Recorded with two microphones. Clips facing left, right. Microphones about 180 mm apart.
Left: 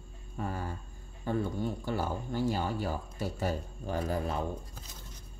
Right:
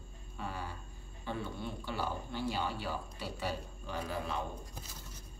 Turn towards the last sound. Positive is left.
turn(degrees=45)  # may be behind; listen again after turning